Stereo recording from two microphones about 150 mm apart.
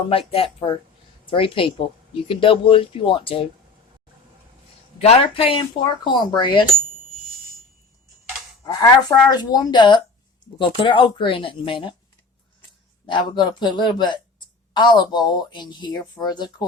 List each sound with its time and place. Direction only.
0.1 s speech: 40° left (ahead or behind)
4.9 s speech: 45° left (ahead or behind)
8.6 s a woman's voice: 25° left (ahead or behind)
13.1 s a woman's voice: 30° left (ahead or behind)